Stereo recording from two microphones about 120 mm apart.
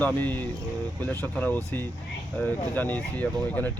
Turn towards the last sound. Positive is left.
turn(degrees=15)  # may be behind; listen again after turning